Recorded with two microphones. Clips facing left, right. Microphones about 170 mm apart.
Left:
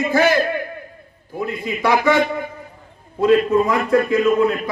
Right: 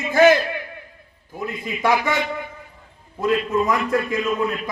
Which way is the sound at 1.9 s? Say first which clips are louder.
Left 5 dB; 50° left (ahead or behind).